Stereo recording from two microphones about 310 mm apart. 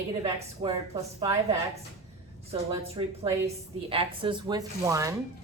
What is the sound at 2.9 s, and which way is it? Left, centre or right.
A woman's voice, centre.